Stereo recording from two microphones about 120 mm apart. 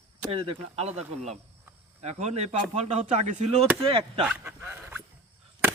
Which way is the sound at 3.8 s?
50° right (ahead or behind).